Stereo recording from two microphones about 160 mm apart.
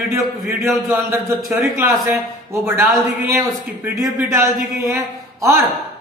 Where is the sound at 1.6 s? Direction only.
15° right (ahead or behind).